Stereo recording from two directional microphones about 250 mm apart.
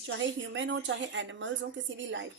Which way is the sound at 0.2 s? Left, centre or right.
Right.